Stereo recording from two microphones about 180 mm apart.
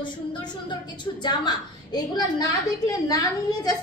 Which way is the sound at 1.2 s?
25° left (ahead or behind).